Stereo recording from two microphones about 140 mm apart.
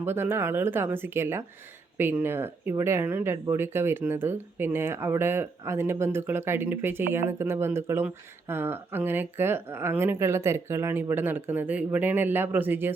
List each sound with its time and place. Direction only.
0.0 s speech: 15° right (ahead or behind)